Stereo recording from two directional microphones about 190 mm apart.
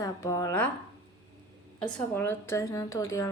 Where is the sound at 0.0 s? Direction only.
20° left (ahead or behind).